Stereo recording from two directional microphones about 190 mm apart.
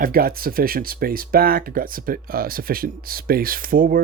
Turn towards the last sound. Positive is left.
turn(degrees=-50)  # may be behind; listen again after turning